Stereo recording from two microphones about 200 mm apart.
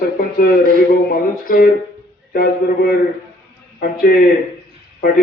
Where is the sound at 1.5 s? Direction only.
45° left (ahead or behind).